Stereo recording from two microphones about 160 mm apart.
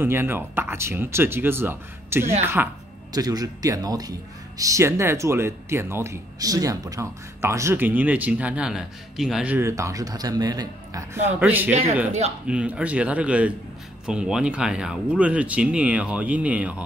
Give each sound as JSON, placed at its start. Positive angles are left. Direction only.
{"t": 0.0, "sound": "a man's voice", "side_deg": -15}
{"t": 11.3, "sound": "a man's voice", "side_deg": -10}